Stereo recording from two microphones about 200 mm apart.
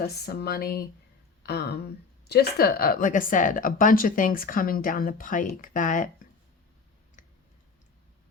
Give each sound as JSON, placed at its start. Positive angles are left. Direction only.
{"t": 0.1, "sound": "a woman's voice", "side_deg": 55}
{"t": 7.2, "sound": "clicking", "side_deg": 40}